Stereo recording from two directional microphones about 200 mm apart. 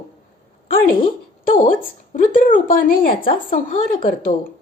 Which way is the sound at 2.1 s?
40° left (ahead or behind).